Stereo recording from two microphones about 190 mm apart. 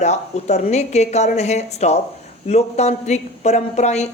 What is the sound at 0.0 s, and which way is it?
Speech, 35° left (ahead or behind).